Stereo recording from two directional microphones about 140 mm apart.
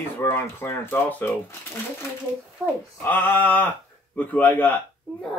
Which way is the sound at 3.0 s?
15° left (ahead or behind).